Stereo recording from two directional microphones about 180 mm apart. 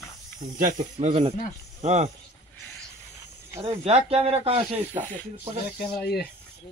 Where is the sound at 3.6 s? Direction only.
35° right (ahead or behind).